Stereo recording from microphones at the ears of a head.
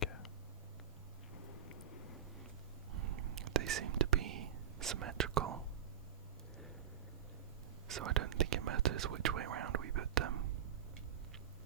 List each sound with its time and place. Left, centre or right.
1.5 s a sound: left
2.9 s whispering: right
7.9 s whispering: right